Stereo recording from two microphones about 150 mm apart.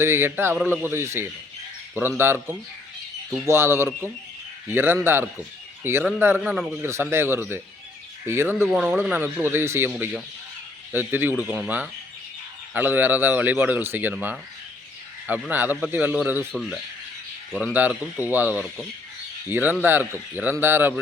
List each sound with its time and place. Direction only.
0.0 s speech: 15° right (ahead or behind)
6.8 s speech: 15° right (ahead or behind)
16.5 s speech: centre (ahead or behind)
17.6 s speech: 10° right (ahead or behind)